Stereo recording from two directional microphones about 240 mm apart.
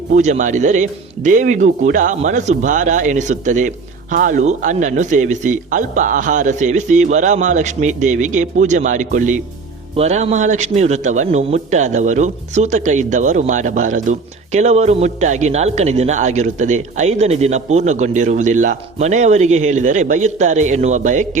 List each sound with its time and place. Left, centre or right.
0.1 s a man's voice: right